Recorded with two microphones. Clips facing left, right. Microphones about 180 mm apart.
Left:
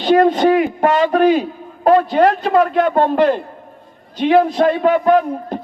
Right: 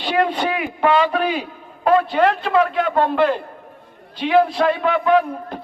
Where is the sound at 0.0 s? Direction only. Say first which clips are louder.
Left 8 dB; 45° left (ahead or behind).